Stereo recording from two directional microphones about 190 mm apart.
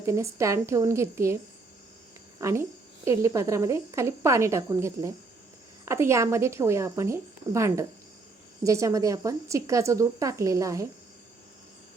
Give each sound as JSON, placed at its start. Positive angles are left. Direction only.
{"t": 0.0, "sound": "a woman's voice", "side_deg": -15}
{"t": 2.4, "sound": "a woman's voice", "side_deg": -15}